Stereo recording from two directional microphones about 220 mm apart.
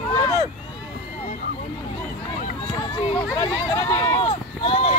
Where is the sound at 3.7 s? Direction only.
15° left (ahead or behind).